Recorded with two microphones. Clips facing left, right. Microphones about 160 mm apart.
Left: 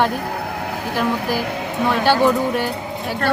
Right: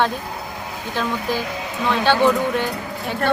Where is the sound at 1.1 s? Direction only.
65° left (ahead or behind).